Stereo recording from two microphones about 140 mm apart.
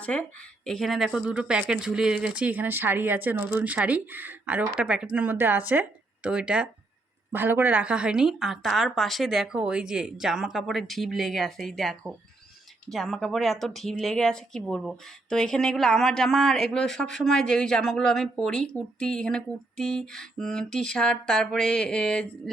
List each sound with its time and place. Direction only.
0.0 s speech: 10° left (ahead or behind)